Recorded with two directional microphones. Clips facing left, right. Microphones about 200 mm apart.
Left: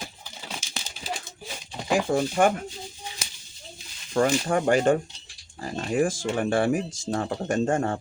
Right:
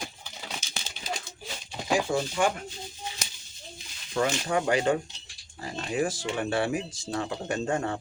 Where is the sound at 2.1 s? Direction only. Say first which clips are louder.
Left 5 dB; 55° left (ahead or behind).